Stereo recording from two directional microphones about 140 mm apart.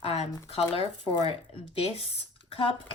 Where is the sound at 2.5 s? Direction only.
40° left (ahead or behind).